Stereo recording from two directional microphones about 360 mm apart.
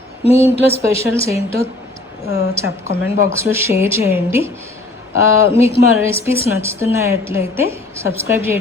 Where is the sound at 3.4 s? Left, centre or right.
Centre.